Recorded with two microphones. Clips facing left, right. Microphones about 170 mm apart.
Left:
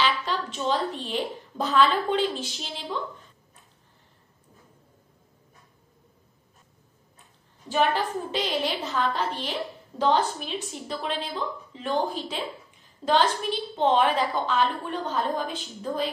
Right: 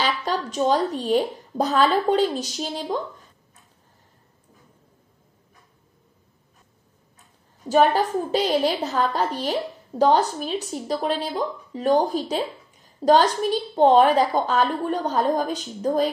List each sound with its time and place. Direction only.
0.0 s speech: 40° right (ahead or behind)
7.6 s a woman's voice: 40° right (ahead or behind)